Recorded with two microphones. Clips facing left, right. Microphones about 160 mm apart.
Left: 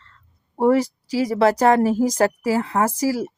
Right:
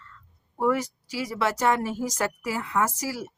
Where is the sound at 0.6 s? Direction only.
35° left (ahead or behind).